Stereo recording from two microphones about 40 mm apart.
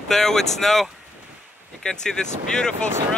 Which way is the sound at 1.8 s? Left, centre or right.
Centre.